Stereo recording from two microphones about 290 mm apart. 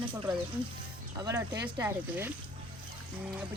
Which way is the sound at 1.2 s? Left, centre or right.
Centre.